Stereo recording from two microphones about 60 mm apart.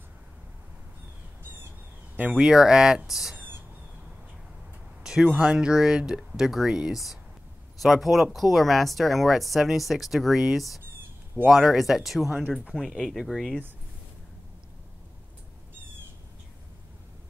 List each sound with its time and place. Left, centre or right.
2.1 s speech: centre
3.3 s owl: right
5.0 s speech: centre
12.8 s speech: centre